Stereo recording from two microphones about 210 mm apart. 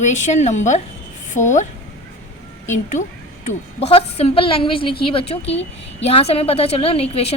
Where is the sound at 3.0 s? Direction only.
35° left (ahead or behind).